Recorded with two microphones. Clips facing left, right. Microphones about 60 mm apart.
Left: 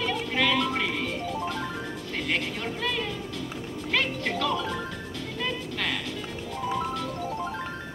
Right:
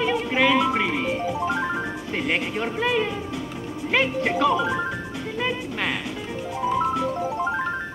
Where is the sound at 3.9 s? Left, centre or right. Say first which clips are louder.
Right 6 dB; centre.